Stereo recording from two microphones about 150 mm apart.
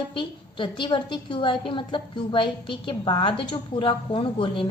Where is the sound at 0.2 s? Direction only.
35° left (ahead or behind).